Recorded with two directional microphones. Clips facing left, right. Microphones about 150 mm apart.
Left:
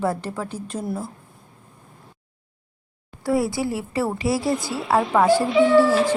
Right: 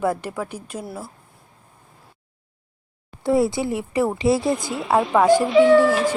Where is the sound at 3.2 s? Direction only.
25° right (ahead or behind).